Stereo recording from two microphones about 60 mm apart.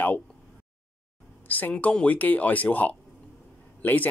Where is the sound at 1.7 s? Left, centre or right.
Centre.